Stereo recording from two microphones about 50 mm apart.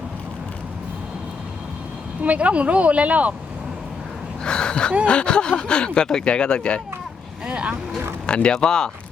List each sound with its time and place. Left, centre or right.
2.2 s speech: right
4.4 s speech: centre
7.4 s speech: centre
8.3 s speech: centre